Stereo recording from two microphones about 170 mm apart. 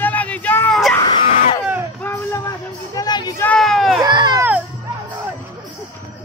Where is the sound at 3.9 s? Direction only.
25° right (ahead or behind).